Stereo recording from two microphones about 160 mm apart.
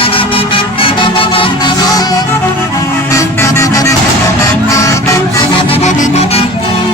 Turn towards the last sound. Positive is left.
turn(degrees=45)  # may be behind; listen again after turning